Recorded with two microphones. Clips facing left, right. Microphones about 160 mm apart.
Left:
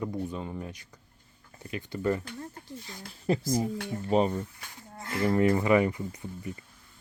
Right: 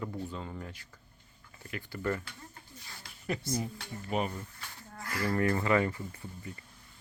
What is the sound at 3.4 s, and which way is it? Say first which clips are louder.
Speech: left 6 dB; 90° left.